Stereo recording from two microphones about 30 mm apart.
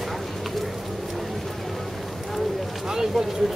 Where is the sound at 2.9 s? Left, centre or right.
Centre.